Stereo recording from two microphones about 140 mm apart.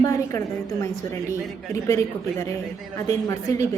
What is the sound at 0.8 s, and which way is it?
A woman's voice, 20° left (ahead or behind).